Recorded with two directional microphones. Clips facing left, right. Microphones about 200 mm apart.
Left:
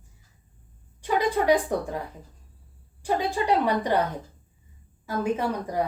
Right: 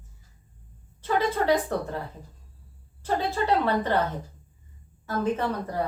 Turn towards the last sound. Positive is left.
turn(degrees=10)  # may be behind; listen again after turning